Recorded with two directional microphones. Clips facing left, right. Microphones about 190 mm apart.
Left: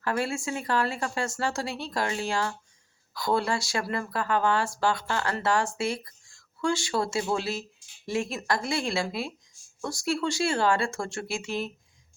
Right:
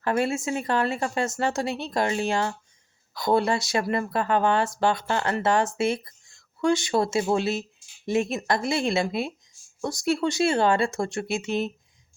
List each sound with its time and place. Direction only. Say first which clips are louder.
0.0 s speech: right 4 dB; 20° right (ahead or behind)